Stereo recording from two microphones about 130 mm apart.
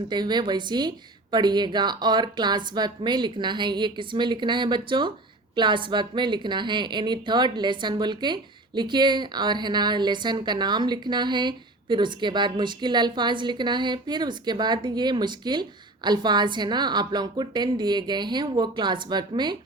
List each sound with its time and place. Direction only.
0.1 s a woman's voice: 35° right (ahead or behind)